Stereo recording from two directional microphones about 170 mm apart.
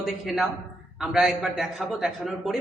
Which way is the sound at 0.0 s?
Centre (ahead or behind).